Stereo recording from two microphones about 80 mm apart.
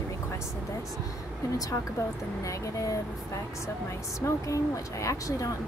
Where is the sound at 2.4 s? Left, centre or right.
Left.